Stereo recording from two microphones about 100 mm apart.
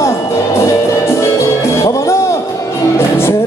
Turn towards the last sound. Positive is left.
turn(degrees=25)  # may be behind; listen again after turning